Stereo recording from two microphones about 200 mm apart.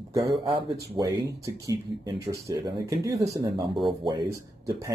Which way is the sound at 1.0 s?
20° right (ahead or behind).